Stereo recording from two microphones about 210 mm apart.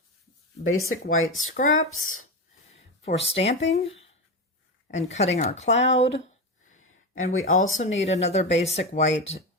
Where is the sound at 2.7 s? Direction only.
30° left (ahead or behind).